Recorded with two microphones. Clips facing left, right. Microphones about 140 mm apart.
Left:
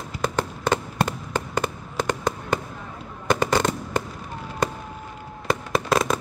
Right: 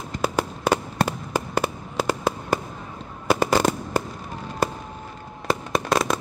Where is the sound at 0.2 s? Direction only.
10° right (ahead or behind).